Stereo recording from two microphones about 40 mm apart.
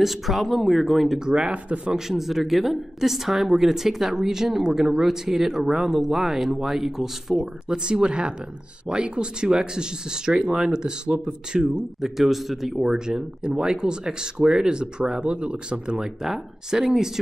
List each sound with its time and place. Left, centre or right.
0.0 s speech: centre
1.2 s speech: right
2.0 s speech: centre
7.6 s speech: right
12.2 s speech: centre
12.8 s speech: centre
16.2 s speech: centre